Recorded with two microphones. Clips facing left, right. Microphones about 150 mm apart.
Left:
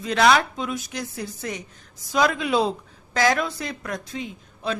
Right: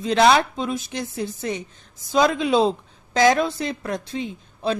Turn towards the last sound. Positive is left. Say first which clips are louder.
# right 4 dB
turn(degrees=-30)  # may be behind; listen again after turning